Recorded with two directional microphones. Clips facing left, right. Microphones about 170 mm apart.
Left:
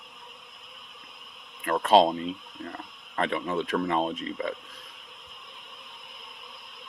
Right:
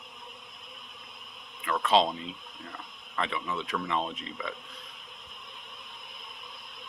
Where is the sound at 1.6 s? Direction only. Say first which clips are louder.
Left 5 dB; 45° left (ahead or behind).